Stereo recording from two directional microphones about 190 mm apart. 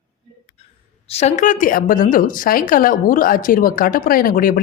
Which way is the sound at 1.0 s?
35° left (ahead or behind).